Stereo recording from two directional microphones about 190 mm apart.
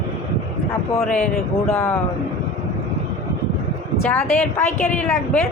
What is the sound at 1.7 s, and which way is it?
Speech, 15° left (ahead or behind).